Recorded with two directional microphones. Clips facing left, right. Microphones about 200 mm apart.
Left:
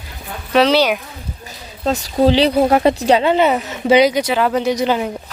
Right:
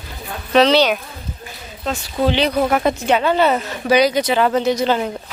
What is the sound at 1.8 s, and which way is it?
Speech, 40° left (ahead or behind).